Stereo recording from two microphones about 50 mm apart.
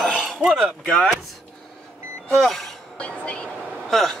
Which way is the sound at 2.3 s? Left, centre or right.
Centre.